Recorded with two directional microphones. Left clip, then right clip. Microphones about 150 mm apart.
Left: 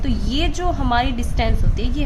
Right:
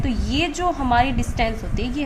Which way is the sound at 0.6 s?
35° left (ahead or behind).